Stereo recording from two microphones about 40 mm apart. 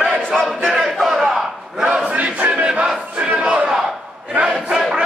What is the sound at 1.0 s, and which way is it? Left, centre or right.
Battle cry, centre.